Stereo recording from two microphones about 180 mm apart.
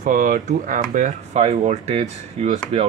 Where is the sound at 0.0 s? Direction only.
50° right (ahead or behind).